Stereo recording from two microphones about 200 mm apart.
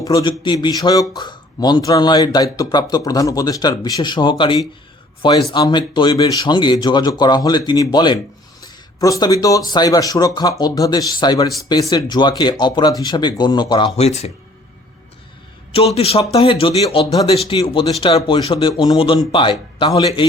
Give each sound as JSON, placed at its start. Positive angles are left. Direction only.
{"t": 0.0, "sound": "speech", "side_deg": 20}
{"t": 15.7, "sound": "speech", "side_deg": 30}